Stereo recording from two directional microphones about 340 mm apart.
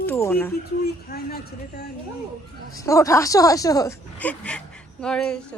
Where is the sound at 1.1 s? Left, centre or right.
Left.